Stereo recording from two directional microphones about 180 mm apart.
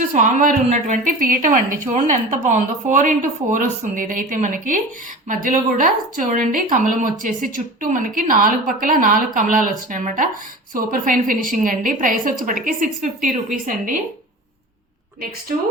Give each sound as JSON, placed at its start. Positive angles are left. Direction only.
{"t": 0.1, "sound": "speech", "side_deg": -45}